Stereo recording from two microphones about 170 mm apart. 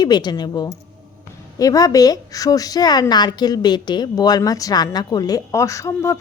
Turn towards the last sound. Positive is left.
turn(degrees=15)  # may be behind; listen again after turning